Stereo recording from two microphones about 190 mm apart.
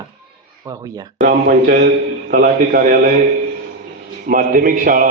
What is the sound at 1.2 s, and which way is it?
A man's voice, 45° right (ahead or behind).